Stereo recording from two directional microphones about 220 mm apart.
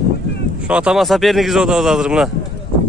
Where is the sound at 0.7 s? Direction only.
5° right (ahead or behind).